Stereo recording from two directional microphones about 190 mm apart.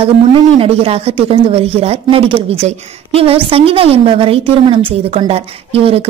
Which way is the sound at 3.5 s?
30° right (ahead or behind).